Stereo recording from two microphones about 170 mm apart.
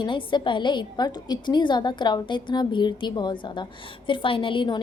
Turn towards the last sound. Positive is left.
turn(degrees=30)  # may be behind; listen again after turning